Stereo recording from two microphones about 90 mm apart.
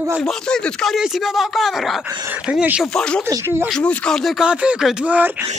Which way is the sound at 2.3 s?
15° right (ahead or behind).